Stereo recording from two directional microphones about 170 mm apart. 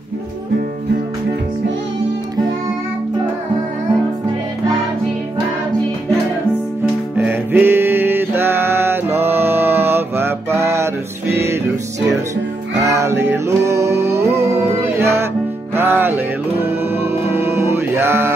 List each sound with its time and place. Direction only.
7.2 s music: 10° right (ahead or behind)
12.8 s music: 15° right (ahead or behind)